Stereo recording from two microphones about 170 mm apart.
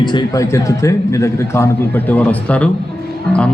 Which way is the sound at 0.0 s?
25° left (ahead or behind).